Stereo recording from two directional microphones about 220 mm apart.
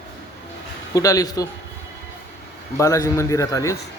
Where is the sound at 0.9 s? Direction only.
15° left (ahead or behind).